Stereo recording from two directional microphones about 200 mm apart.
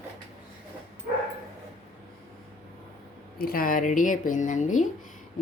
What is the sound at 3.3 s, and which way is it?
Speech, 50° left (ahead or behind).